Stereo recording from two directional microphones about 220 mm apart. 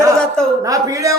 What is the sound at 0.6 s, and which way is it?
Speech, 15° right (ahead or behind).